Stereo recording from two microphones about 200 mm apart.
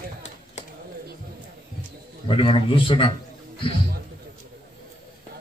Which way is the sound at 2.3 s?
25° left (ahead or behind).